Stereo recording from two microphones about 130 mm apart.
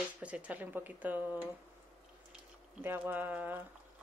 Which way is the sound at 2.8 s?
15° right (ahead or behind).